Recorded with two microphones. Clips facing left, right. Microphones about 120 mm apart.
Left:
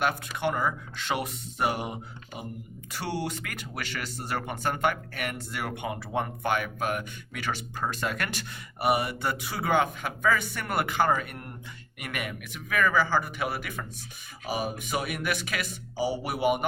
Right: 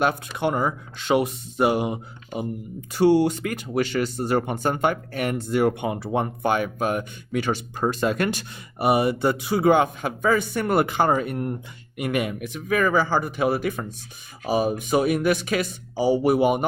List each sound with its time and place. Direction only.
0.3 s speech: 25° right (ahead or behind)
2.9 s speech: 25° right (ahead or behind)